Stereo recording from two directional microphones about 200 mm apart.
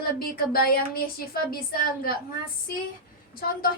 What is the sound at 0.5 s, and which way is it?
A woman's voice, 50° left (ahead or behind).